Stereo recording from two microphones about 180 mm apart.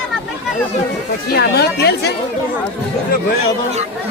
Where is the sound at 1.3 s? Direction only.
65° left (ahead or behind).